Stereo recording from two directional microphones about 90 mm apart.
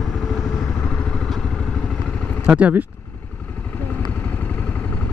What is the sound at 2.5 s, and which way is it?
Speech, 15° right (ahead or behind).